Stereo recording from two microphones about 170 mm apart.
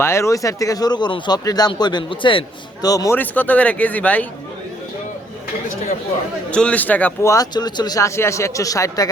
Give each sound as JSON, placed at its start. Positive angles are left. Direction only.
{"t": 0.0, "sound": "speech", "side_deg": 15}
{"t": 6.5, "sound": "speech", "side_deg": 5}